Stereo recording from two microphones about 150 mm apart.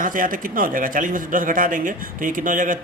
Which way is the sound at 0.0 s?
65° right (ahead or behind).